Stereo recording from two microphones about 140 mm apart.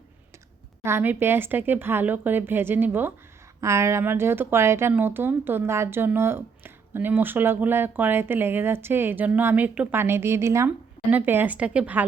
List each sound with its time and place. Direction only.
0.8 s speech: 15° right (ahead or behind)